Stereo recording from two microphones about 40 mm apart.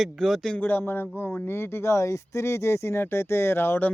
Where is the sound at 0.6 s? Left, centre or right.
Left.